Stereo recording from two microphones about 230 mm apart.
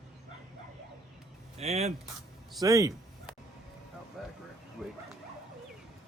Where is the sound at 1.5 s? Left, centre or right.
Right.